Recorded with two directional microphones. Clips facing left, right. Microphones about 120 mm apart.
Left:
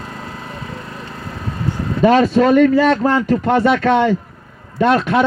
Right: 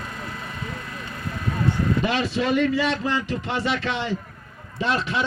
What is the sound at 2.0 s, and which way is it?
Speech, 45° left (ahead or behind).